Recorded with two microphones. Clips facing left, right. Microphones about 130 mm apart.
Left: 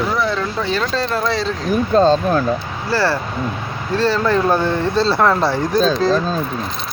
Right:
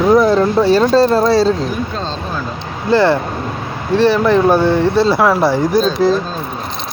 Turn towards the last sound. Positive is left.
turn(degrees=-10)  # may be behind; listen again after turning